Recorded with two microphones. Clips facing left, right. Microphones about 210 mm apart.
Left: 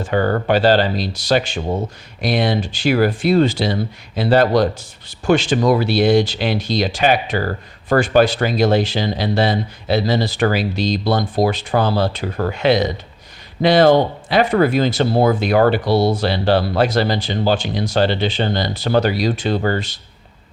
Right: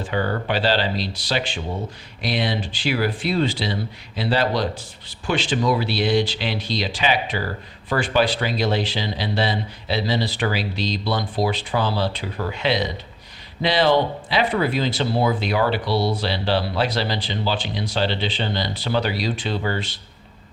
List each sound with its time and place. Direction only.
0.0 s speech: 50° left (ahead or behind)